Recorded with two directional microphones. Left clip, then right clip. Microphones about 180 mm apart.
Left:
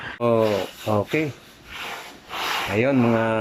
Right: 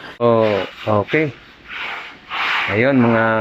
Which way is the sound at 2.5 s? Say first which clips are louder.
Right 5 dB; centre (ahead or behind).